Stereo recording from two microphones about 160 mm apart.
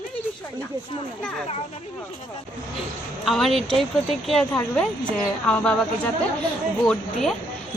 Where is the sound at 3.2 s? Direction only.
Centre (ahead or behind).